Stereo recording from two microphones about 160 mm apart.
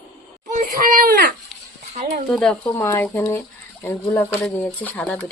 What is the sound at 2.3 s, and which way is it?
Speech, 5° left (ahead or behind).